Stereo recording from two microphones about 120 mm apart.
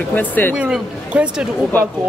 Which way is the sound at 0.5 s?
10° right (ahead or behind).